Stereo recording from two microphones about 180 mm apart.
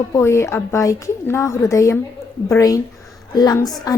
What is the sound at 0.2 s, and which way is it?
A woman's voice, 15° left (ahead or behind).